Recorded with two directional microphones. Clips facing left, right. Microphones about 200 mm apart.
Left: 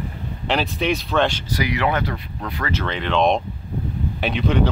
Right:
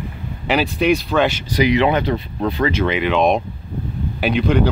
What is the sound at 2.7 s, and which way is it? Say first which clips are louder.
Speech: right 2 dB; 10° right (ahead or behind).